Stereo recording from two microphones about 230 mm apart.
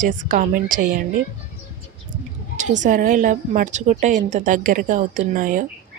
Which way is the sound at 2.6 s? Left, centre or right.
Right.